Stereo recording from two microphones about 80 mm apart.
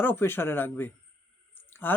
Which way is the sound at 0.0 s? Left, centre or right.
Left.